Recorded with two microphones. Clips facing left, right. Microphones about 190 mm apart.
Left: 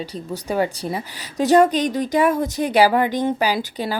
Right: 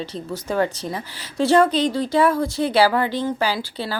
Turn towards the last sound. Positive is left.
turn(degrees=15)  # may be behind; listen again after turning